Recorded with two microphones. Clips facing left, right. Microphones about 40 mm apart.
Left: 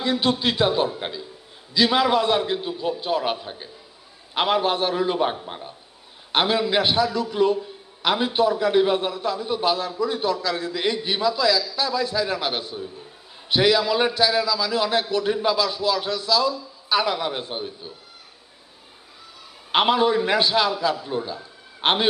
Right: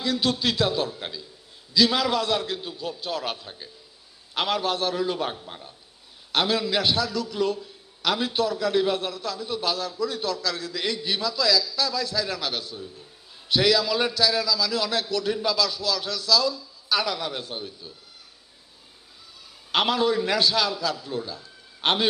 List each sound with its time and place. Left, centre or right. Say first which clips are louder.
0.0 s a man's voice: left 3 dB; left
19.7 s a man's voice: left 4 dB; left